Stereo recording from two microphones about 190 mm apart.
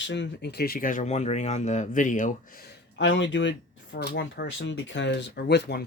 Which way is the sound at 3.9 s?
60° left (ahead or behind).